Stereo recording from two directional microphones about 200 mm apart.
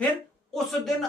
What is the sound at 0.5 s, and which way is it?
Speech, centre (ahead or behind).